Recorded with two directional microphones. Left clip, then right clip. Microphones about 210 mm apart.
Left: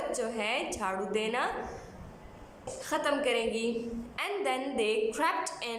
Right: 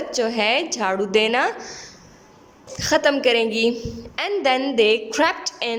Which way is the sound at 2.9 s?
45° right (ahead or behind).